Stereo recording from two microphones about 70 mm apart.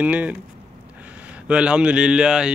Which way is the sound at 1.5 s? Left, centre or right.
Centre.